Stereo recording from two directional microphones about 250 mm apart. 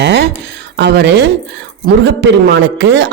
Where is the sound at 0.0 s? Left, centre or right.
Right.